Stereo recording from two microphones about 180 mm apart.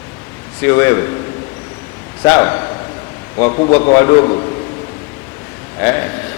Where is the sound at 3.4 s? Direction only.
30° left (ahead or behind).